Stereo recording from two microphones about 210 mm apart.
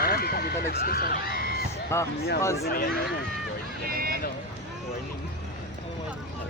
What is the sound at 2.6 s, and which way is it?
Speech, 45° left (ahead or behind).